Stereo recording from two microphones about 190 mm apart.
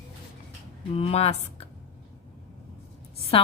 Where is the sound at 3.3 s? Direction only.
30° left (ahead or behind).